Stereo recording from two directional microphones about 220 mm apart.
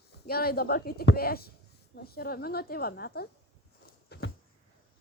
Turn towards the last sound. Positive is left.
turn(degrees=50)  # may be behind; listen again after turning